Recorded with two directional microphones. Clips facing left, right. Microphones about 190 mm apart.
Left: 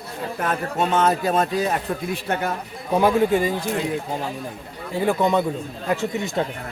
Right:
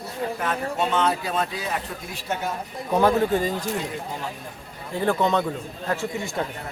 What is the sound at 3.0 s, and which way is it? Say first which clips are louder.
Speech: left 2 dB; 10° left (ahead or behind).